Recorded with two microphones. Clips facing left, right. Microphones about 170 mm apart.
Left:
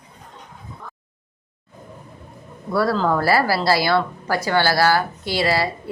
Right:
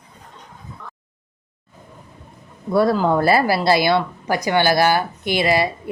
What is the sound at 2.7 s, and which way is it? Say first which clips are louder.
A woman's voice: right 3 dB; 20° right (ahead or behind).